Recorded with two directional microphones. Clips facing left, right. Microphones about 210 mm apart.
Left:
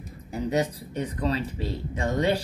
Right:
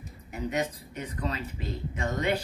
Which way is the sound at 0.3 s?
35° left (ahead or behind).